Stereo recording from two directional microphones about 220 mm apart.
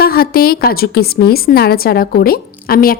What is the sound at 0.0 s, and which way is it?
A woman's voice, 45° left (ahead or behind).